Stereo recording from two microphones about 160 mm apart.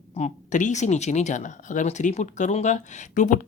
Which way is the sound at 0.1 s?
45° left (ahead or behind).